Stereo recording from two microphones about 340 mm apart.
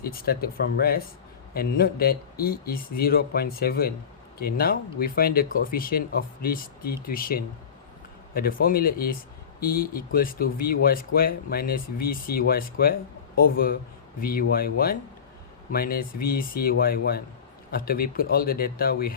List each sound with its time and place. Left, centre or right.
0.0 s speech: left